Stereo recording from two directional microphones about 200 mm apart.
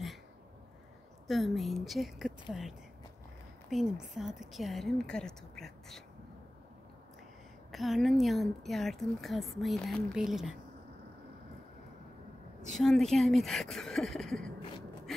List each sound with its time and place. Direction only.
1.2 s a woman's voice: centre (ahead or behind)
3.7 s a woman's voice: centre (ahead or behind)
7.7 s a woman's voice: centre (ahead or behind)
12.7 s a woman's voice: centre (ahead or behind)